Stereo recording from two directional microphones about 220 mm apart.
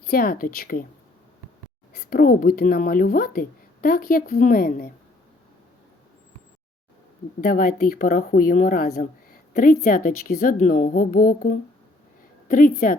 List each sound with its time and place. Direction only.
0.1 s speech: 40° left (ahead or behind)
2.0 s speech: 40° left (ahead or behind)
7.4 s a woman's voice: 40° left (ahead or behind)